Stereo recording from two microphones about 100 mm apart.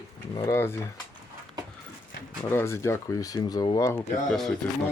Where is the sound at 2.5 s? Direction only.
25° left (ahead or behind); by 3.8 s 45° left (ahead or behind).